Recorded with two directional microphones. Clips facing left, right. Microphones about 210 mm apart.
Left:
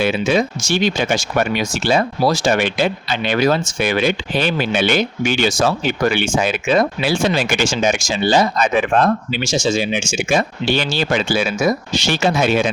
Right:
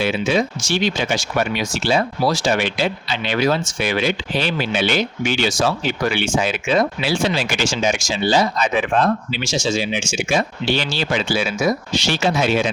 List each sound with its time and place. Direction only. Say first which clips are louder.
0.0 s speech: left 2 dB; 50° left (ahead or behind)